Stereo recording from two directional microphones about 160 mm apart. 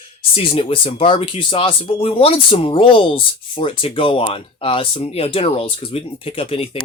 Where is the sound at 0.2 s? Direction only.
35° left (ahead or behind).